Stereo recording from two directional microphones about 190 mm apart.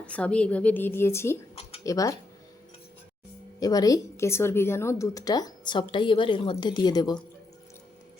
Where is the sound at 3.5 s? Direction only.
20° left (ahead or behind).